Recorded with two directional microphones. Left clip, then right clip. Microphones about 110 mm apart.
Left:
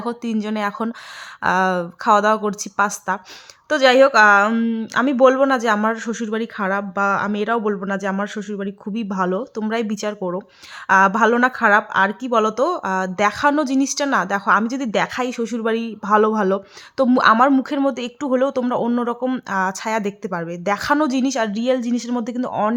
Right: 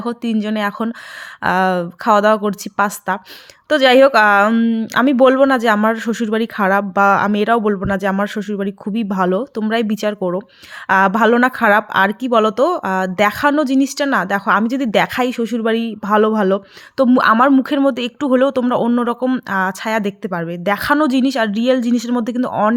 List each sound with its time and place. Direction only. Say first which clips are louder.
0.0 s a woman's voice: right 3 dB; 15° right (ahead or behind)
4.5 s a woman's voice: right 5 dB; 20° right (ahead or behind)
4.9 s a woman's voice: right 3 dB; 30° right (ahead or behind)
19.3 s a woman's voice: right 3 dB; 20° right (ahead or behind)